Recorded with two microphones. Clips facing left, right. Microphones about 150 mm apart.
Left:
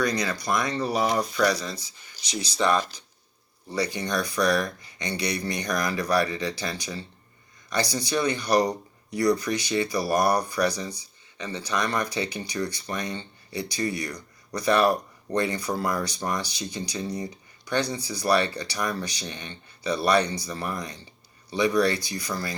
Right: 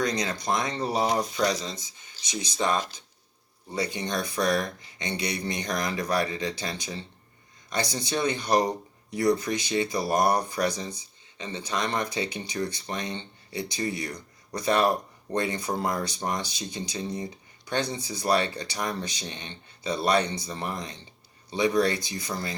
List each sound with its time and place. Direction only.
0.0 s speech: 25° right (ahead or behind)